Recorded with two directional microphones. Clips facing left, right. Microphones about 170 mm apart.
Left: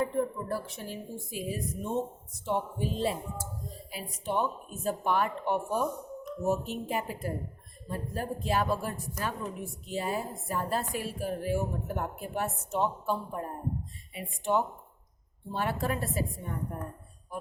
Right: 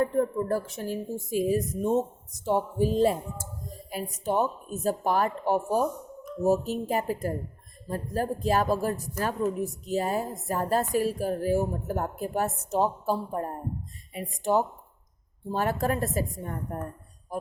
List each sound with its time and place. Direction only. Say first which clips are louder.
0.0 s a woman's voice: right 5 dB; 45° right (ahead or behind)